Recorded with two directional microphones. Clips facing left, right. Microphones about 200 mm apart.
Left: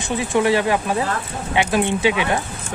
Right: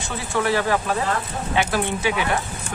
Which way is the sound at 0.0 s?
15° left (ahead or behind).